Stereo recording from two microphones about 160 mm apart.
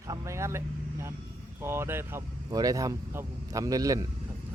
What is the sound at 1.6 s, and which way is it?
Speech, 15° right (ahead or behind).